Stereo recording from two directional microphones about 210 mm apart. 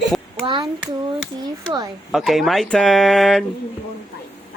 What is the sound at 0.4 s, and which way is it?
A child's voice, 20° right (ahead or behind).